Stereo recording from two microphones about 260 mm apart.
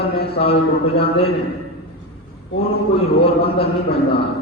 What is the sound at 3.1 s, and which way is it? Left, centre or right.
Speech, left.